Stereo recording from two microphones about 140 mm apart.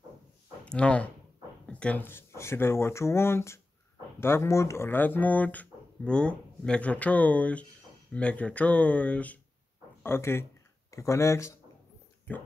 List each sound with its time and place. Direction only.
0.7 s speech: 5° left (ahead or behind)